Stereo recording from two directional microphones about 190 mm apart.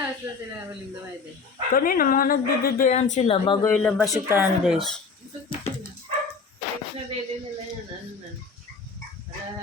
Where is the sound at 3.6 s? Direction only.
5° left (ahead or behind).